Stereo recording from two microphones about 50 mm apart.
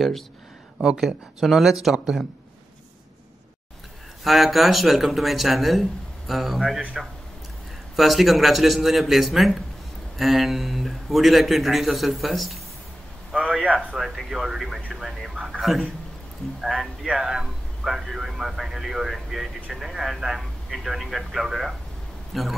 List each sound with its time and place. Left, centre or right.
0.7 s speech: centre
1.0 s speech: centre
4.2 s speech: centre
7.9 s speech: centre
13.3 s a sound: right
13.9 s speech: centre
14.9 s radio: centre
15.7 s speech: centre
17.2 s a sound: centre
22.3 s a man's voice: centre